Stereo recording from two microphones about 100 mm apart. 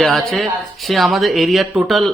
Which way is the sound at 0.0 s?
Centre (ahead or behind).